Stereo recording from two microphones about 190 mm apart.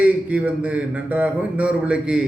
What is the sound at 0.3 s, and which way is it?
A man's voice, 5° right (ahead or behind).